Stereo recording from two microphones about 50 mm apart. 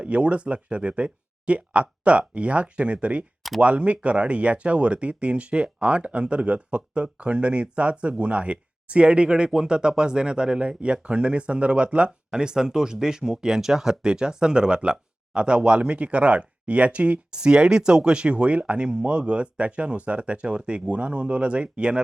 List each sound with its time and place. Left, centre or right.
0.0 s speech: right